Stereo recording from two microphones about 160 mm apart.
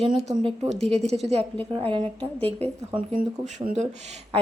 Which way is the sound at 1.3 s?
40° right (ahead or behind).